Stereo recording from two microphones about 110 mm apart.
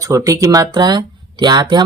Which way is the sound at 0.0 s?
30° right (ahead or behind).